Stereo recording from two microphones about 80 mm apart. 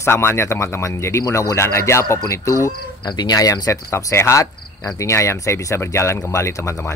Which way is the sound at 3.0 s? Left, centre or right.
Left.